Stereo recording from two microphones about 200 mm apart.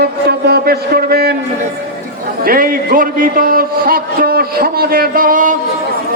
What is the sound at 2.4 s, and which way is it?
A man's voice, 45° right (ahead or behind).